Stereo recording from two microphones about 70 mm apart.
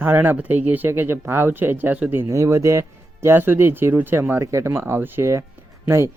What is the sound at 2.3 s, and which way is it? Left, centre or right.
Speech, right.